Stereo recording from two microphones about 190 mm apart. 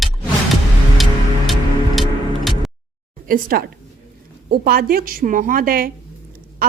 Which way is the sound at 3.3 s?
50° right (ahead or behind).